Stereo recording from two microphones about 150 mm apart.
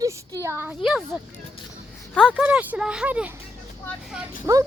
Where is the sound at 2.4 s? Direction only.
10° right (ahead or behind).